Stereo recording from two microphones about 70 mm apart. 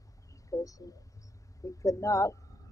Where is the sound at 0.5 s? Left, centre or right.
Left.